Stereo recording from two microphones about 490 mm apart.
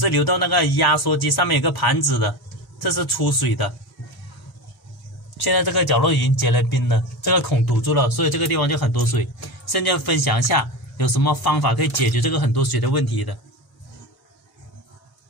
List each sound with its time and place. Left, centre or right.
0.0 s a man's voice: left
5.4 s a man's voice: left